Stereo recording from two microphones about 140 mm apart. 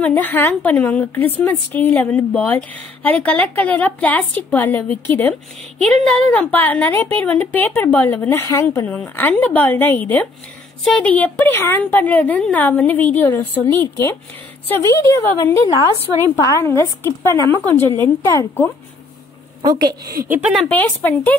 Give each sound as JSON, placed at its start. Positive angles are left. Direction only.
{"t": 0.0, "sound": "a woman's voice", "side_deg": 10}
{"t": 19.6, "sound": "a woman's voice", "side_deg": -30}
{"t": 20.5, "sound": "a woman's voice", "side_deg": 10}